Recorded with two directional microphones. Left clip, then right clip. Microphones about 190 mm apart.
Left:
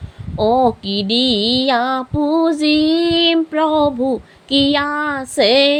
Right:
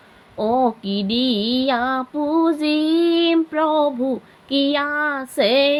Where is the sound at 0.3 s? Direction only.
35° left (ahead or behind).